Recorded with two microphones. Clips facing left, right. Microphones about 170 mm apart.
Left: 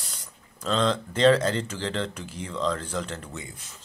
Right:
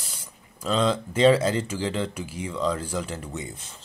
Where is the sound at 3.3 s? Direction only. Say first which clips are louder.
Right 4 dB; 25° right (ahead or behind).